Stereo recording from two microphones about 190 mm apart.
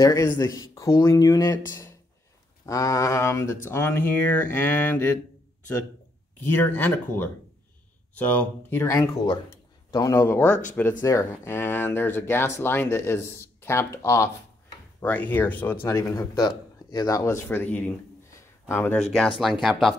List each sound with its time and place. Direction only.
0.0 s speech: 15° left (ahead or behind)
6.4 s speech: 10° left (ahead or behind)